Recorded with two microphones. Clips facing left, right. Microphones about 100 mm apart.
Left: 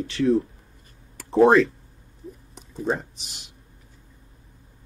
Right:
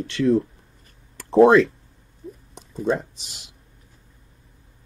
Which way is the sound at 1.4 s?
85° right.